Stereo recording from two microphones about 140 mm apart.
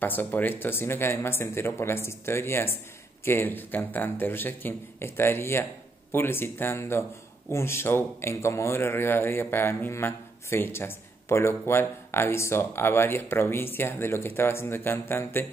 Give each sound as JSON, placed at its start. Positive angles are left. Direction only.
{"t": 0.0, "sound": "speech", "side_deg": 15}